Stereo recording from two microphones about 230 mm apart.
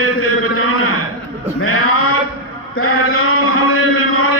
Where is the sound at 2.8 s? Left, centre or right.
Left.